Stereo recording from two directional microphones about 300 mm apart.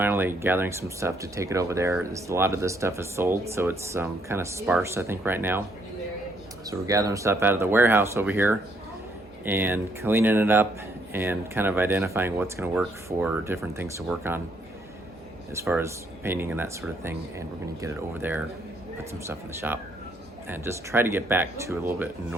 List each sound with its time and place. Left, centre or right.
0.0 s speech: centre
6.7 s speech: centre
15.5 s speech: centre